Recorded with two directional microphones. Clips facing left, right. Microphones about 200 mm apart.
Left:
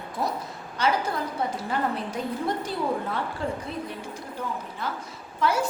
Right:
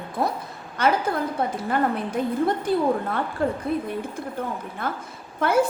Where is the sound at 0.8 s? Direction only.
55° right (ahead or behind).